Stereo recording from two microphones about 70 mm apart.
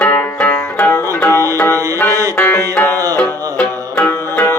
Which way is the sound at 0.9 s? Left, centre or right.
Left.